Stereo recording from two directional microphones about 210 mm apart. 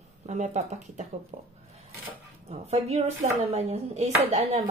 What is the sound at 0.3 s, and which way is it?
Speech, 35° right (ahead or behind).